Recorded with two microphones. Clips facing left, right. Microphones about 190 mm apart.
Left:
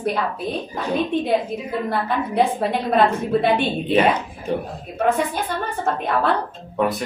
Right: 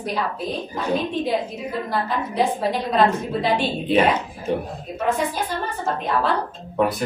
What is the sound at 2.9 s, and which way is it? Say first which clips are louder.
Speech: left 2 dB; 55° left (ahead or behind).